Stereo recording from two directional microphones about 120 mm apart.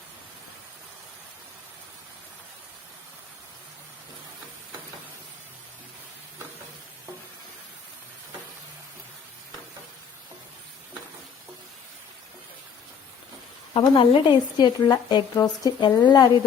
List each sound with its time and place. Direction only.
13.7 s a woman's voice: 45° left (ahead or behind)